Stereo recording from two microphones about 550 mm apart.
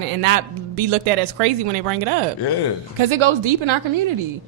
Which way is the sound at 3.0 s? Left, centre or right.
Right.